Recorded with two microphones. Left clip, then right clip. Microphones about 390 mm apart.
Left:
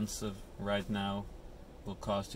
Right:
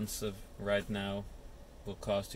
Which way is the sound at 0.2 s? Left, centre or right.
Centre.